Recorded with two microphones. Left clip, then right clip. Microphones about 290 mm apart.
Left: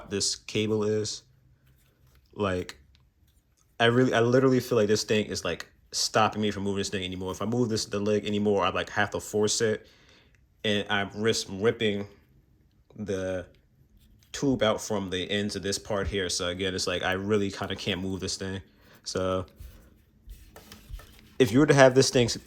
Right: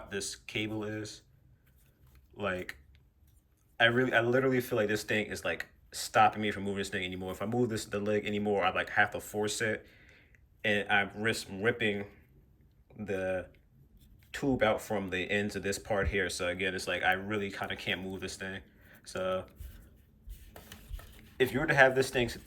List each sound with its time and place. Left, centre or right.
0.1 s speech: centre
2.4 s speech: centre
3.8 s speech: centre
21.2 s speech: centre